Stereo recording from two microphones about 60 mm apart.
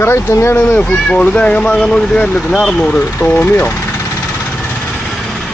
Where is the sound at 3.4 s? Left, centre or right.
Left.